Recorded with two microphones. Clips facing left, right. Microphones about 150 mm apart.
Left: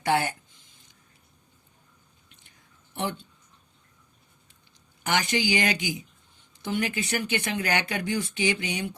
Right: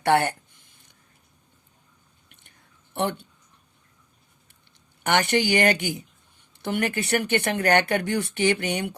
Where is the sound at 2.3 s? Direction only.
60° right (ahead or behind).